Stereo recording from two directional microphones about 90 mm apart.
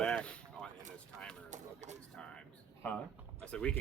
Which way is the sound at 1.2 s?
10° left (ahead or behind).